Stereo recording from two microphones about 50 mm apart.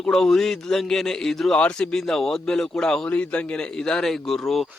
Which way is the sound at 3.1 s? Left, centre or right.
Left.